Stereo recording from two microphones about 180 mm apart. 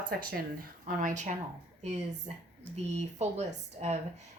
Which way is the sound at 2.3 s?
35° right (ahead or behind).